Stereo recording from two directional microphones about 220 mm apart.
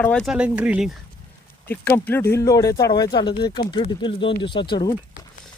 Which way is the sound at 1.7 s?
10° left (ahead or behind).